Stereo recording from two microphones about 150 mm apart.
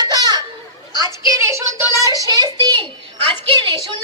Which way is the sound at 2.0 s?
25° right (ahead or behind).